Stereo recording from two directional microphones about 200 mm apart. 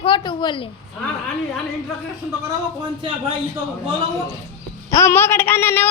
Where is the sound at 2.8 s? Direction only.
25° right (ahead or behind).